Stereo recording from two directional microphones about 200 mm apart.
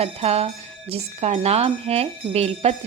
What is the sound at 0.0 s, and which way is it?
Speech, 30° right (ahead or behind).